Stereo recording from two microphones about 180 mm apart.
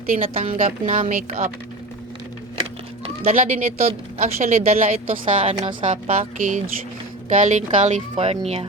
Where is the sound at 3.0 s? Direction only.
40° right (ahead or behind).